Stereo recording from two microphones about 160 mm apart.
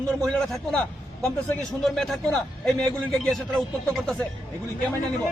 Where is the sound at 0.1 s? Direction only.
Centre (ahead or behind).